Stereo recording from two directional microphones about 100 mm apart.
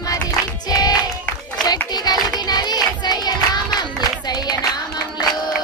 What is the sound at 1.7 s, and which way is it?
Child singing, 45° left (ahead or behind).